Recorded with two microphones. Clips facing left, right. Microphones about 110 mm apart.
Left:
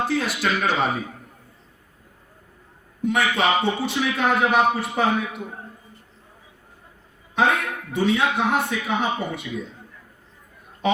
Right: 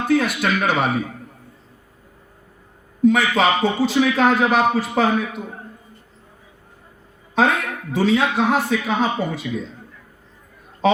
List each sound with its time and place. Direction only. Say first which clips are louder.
0.1 s speech: right 5 dB; 50° right (ahead or behind)
3.0 s a man's voice: right 5 dB; 90° right
7.4 s a man's voice: right 2 dB; 90° right